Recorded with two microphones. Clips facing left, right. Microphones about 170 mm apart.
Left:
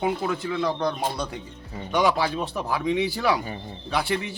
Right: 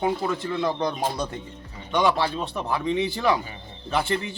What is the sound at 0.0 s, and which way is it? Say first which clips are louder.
Speech: even; 5° left (ahead or behind).